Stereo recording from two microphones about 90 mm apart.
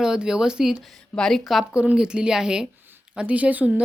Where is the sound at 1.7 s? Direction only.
10° right (ahead or behind).